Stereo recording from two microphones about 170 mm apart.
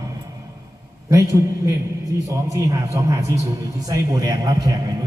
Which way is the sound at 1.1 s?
20° right (ahead or behind).